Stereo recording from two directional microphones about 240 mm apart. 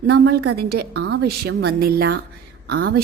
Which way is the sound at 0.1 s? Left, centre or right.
Right.